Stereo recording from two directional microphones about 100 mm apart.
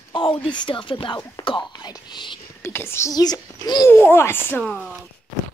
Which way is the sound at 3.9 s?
25° left (ahead or behind).